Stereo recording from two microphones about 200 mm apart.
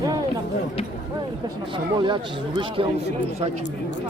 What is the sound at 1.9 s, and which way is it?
Speech, 20° right (ahead or behind).